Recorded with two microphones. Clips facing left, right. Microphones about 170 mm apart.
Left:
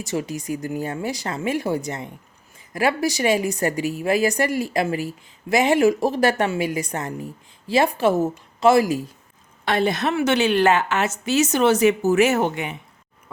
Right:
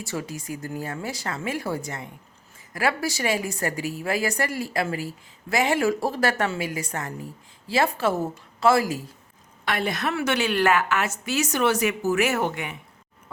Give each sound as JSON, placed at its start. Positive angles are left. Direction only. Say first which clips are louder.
{"t": 0.0, "sound": "a woman's voice", "louder": "left 5 dB", "side_deg": 20}